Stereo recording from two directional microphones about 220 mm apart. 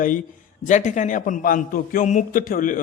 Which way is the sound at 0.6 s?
35° left (ahead or behind).